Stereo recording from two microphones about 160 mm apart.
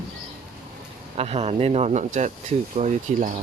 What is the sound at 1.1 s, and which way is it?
Speech, 40° right (ahead or behind).